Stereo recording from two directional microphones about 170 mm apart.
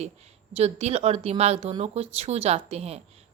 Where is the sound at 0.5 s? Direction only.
40° right (ahead or behind).